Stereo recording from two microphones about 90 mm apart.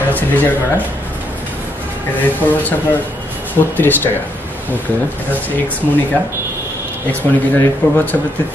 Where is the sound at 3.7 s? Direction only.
20° left (ahead or behind).